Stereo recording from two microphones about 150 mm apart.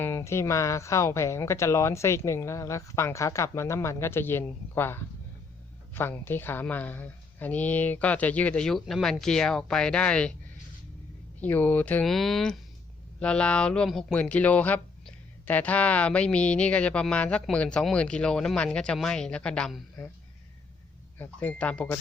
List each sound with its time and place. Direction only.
0.0 s speech: 20° left (ahead or behind)
11.3 s speech: 10° left (ahead or behind)
21.2 s speech: 10° left (ahead or behind)